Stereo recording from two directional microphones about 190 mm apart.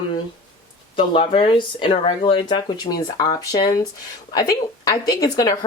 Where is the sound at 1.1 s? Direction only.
30° left (ahead or behind).